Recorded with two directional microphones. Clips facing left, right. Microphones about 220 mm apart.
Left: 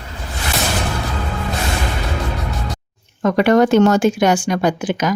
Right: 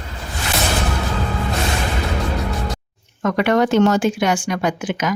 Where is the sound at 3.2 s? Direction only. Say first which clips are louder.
Left 4 dB; 35° left (ahead or behind).